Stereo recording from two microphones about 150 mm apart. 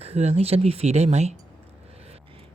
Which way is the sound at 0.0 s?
45° right (ahead or behind).